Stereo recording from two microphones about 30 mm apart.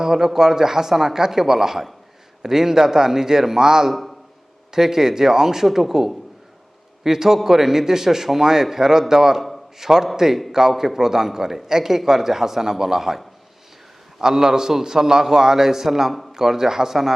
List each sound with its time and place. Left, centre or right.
0.0 s a man's voice: centre